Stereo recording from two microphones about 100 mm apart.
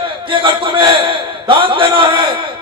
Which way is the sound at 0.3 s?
60° right (ahead or behind).